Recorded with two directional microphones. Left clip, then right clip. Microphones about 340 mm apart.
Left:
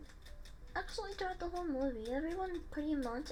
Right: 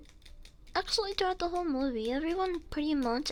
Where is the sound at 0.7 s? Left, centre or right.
Right.